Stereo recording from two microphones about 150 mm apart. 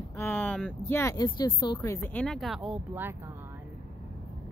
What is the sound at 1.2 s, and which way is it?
Speech, 30° left (ahead or behind).